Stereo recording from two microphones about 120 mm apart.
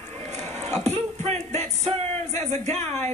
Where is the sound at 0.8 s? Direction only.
65° right (ahead or behind).